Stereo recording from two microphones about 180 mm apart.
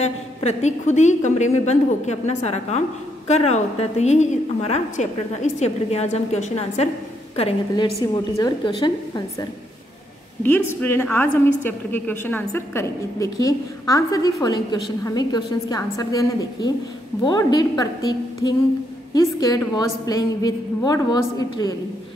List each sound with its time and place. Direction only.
0.0 s a woman's voice: 35° left (ahead or behind)
7.7 s a woman's voice: 20° left (ahead or behind)
10.4 s a woman's voice: 10° left (ahead or behind)